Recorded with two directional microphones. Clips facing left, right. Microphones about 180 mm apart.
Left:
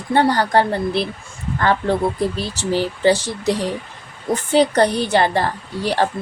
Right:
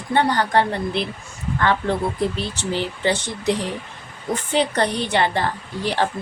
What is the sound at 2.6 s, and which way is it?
Speech, 40° left (ahead or behind).